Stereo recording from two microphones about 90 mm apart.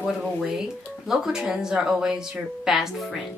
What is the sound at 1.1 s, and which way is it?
A woman's voice, 5° right (ahead or behind).